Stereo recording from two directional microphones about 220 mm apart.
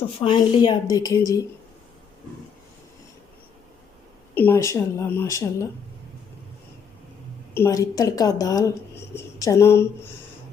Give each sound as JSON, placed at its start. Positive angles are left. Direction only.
{"t": 0.2, "sound": "speech", "side_deg": 20}
{"t": 4.4, "sound": "speech", "side_deg": 10}
{"t": 7.5, "sound": "speech", "side_deg": 15}